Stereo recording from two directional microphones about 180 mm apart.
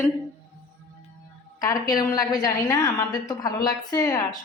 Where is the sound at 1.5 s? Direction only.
20° left (ahead or behind).